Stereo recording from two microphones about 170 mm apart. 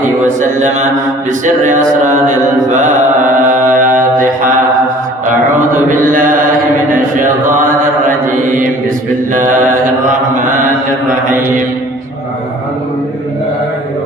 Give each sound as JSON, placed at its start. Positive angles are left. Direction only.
{"t": 0.3, "sound": "speech", "side_deg": -45}
{"t": 1.6, "sound": "mantra", "side_deg": -50}
{"t": 5.9, "sound": "mantra", "side_deg": -50}